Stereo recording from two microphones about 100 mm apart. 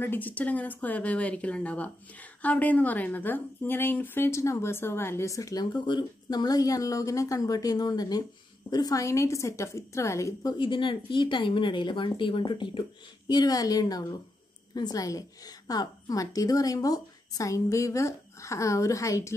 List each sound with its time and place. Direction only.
0.0 s speech: 20° left (ahead or behind)
10.6 s speech: 55° left (ahead or behind)
13.3 s a woman's voice: 40° left (ahead or behind)